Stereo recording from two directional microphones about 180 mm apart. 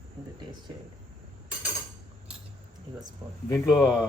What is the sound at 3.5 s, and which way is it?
Speech, 20° left (ahead or behind).